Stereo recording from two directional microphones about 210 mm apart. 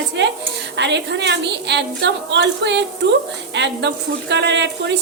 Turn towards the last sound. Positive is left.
turn(degrees=-55)  # may be behind; listen again after turning